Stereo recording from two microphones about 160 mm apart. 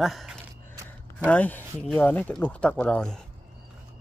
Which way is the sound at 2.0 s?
10° left (ahead or behind).